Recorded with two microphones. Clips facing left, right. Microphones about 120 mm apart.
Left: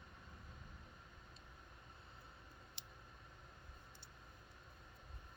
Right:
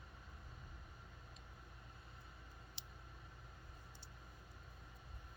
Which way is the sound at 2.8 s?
50° left (ahead or behind).